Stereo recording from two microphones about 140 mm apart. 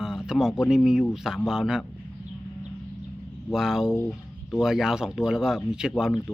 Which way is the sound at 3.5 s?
5° right (ahead or behind).